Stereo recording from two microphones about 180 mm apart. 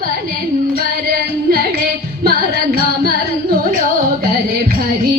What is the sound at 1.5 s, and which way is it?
Music, 55° right (ahead or behind).